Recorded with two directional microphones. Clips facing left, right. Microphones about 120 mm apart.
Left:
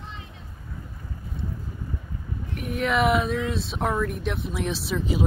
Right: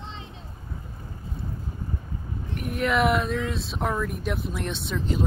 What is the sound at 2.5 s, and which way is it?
Speech, centre (ahead or behind).